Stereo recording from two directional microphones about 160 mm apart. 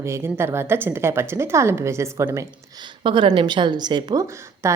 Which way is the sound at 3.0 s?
30° right (ahead or behind).